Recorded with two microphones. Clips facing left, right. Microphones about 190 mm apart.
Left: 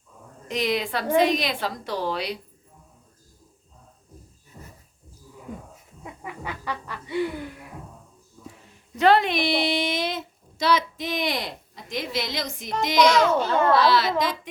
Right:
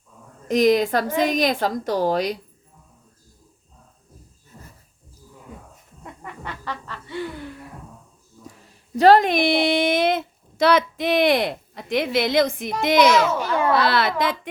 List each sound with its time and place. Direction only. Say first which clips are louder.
0.4 s a woman's voice: right 9 dB; 45° right (ahead or behind)
6.0 s a sound: left 1 dB; 5° left (ahead or behind)
9.0 s a woman's voice: right 5 dB; 40° right (ahead or behind); by 13.1 s 55° right (ahead or behind)
13.1 s a child's voice: right 1 dB; 5° right (ahead or behind)
13.7 s a woman's voice: even; 60° right (ahead or behind)